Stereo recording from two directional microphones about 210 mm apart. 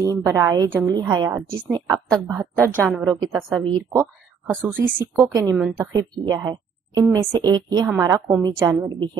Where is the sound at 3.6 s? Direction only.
25° right (ahead or behind).